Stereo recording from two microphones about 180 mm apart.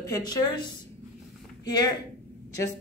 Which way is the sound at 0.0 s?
20° left (ahead or behind).